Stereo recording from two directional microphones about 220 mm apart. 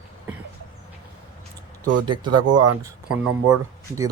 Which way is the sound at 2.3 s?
90° right.